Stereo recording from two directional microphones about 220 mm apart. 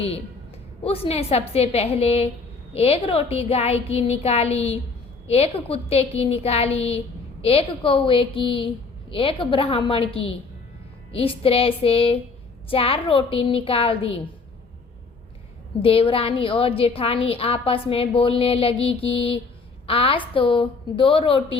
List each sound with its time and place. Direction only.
0.9 s a woman's voice: 25° left (ahead or behind)
15.8 s a woman's voice: 25° left (ahead or behind)